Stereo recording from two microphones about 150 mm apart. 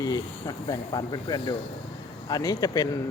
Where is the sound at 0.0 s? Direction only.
25° left (ahead or behind).